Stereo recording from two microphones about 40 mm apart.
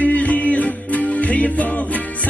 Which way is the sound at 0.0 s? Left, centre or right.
Left.